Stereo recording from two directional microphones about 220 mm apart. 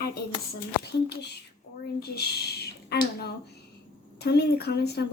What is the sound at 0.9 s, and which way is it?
Speech, 50° left (ahead or behind).